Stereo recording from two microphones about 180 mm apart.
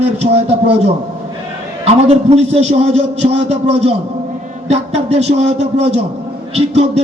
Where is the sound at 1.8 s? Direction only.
35° right (ahead or behind).